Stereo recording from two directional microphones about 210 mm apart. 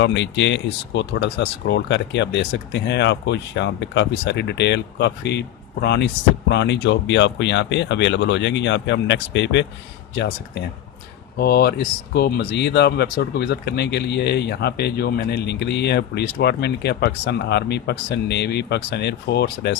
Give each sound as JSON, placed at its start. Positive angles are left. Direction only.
{"t": 0.0, "sound": "speech", "side_deg": 60}